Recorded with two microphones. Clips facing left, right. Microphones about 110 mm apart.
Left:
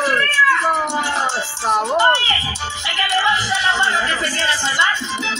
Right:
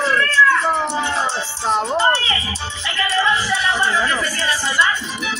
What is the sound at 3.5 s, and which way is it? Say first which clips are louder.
Music: left 1 dB; 20° left (ahead or behind).